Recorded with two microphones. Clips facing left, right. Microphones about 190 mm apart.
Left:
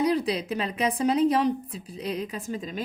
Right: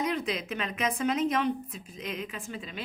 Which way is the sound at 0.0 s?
35° left (ahead or behind).